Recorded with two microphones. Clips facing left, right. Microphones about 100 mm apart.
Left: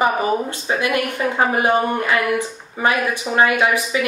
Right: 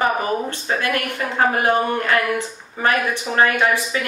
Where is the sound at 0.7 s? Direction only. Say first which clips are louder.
Left 3 dB; 15° left (ahead or behind).